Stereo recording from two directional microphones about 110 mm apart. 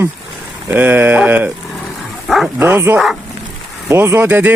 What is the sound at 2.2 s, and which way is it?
Bow-wow, centre (ahead or behind).